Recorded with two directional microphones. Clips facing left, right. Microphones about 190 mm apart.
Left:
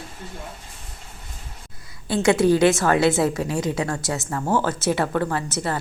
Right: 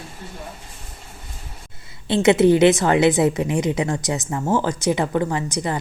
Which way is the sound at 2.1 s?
20° right (ahead or behind).